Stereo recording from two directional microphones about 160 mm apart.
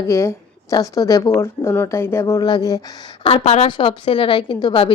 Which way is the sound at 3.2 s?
40° left (ahead or behind).